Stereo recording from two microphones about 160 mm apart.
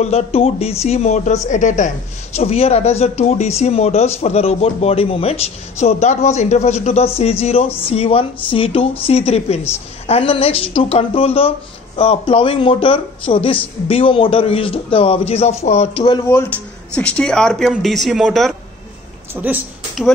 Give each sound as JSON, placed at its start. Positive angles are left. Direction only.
{"t": 0.0, "sound": "speech", "side_deg": 40}
{"t": 2.3, "sound": "speech", "side_deg": 40}
{"t": 16.3, "sound": "speech", "side_deg": 15}